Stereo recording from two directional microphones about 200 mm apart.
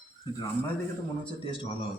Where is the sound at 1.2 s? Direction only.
25° left (ahead or behind).